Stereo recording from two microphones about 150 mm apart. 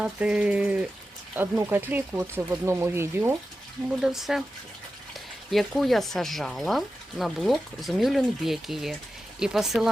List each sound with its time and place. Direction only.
0.0 s speech: 10° right (ahead or behind)
4.0 s speech: centre (ahead or behind)
5.5 s speech: centre (ahead or behind)